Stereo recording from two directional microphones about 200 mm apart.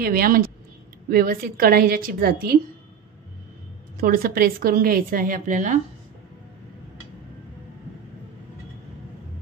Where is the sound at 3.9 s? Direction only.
45° right (ahead or behind).